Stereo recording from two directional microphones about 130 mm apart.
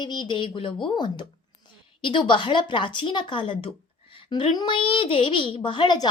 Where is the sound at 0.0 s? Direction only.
35° left (ahead or behind).